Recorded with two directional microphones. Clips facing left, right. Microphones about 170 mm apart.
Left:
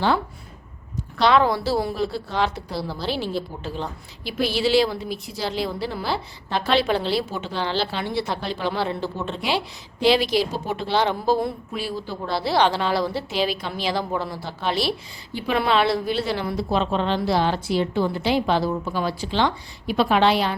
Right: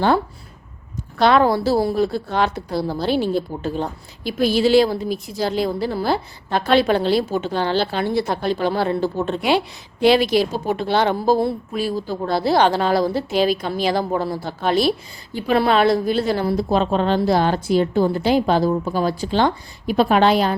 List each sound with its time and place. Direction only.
1.2 s a woman's voice: 50° right (ahead or behind)